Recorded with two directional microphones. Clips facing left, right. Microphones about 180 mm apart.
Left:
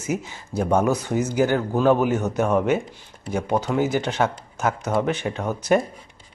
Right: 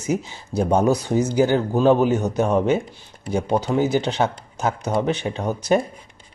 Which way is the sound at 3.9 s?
30° right (ahead or behind).